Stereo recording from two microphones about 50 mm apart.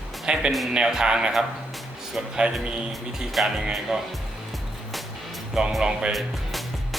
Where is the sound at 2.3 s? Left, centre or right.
Centre.